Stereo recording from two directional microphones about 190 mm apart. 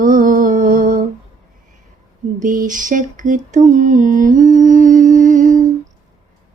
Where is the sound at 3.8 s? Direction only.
40° right (ahead or behind).